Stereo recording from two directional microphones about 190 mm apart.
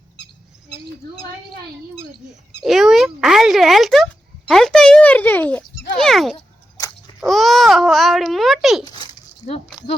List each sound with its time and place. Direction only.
2.6 s speech: centre (ahead or behind)
6.3 s dog: 20° left (ahead or behind)
7.2 s speech: centre (ahead or behind)
8.8 s dog: 20° left (ahead or behind)